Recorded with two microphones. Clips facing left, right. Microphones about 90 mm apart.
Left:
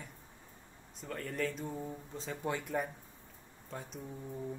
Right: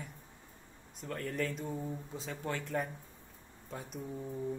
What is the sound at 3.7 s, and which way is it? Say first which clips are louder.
Speech: right 1 dB; centre (ahead or behind).